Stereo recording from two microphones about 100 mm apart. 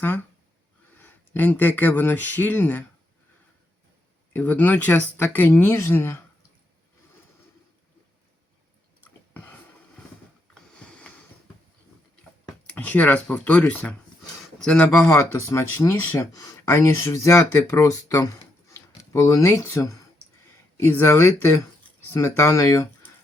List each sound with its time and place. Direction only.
1.0 s speech: 20° left (ahead or behind)
4.3 s speech: 20° left (ahead or behind)
9.0 s chewing: 15° left (ahead or behind)
10.5 s sniff: 10° left (ahead or behind)
12.6 s speech: 15° left (ahead or behind)
15.1 s speech: 25° left (ahead or behind)
16.2 s speech: 35° left (ahead or behind)
16.7 s speech: 25° left (ahead or behind)